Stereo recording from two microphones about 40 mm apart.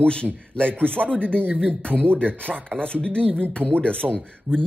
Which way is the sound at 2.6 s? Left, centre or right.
Left.